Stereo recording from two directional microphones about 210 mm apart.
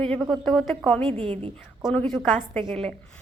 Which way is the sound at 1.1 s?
25° right (ahead or behind).